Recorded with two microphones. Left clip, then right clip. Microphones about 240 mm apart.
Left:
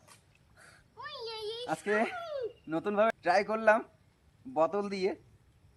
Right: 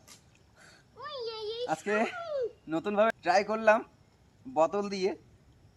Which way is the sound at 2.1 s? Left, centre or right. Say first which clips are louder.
Right 4 dB; left.